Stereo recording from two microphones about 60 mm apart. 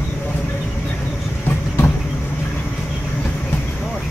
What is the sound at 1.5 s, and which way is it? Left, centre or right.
Vehicle, left.